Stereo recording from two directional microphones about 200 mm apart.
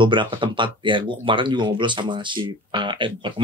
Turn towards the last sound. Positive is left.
turn(degrees=-25)  # may be behind; listen again after turning